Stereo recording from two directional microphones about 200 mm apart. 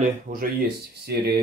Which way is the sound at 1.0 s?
55° right (ahead or behind).